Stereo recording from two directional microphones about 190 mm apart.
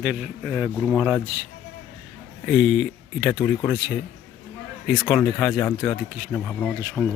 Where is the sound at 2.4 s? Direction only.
Centre (ahead or behind).